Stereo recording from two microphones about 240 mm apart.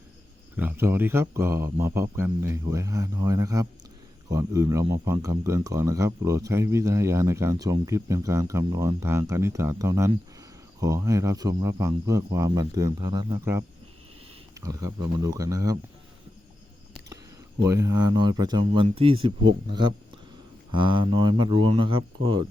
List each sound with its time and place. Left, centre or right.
0.5 s speech: centre
17.6 s speech: centre
20.7 s speech: centre